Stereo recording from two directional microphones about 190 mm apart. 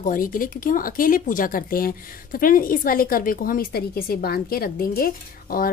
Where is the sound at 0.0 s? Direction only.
45° left (ahead or behind).